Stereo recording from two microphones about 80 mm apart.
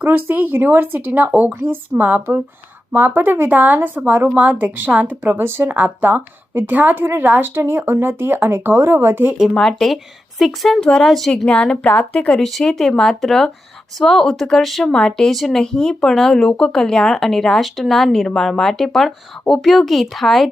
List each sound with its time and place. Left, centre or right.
0.1 s speech: right
9.6 s a woman's voice: centre